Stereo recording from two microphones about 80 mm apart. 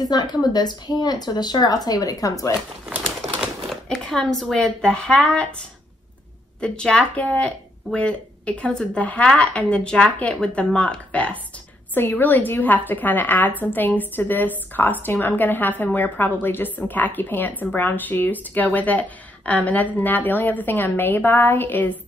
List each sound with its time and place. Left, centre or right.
0.0 s speech: left
3.3 s speech: centre
6.6 s speech: centre